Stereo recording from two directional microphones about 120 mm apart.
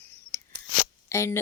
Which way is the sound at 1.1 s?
25° left (ahead or behind).